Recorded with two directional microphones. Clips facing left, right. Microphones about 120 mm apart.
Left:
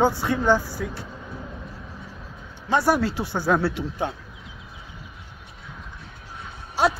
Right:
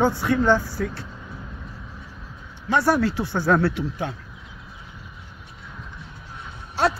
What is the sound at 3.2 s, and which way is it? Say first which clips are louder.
Speech: right 2 dB; 10° left (ahead or behind).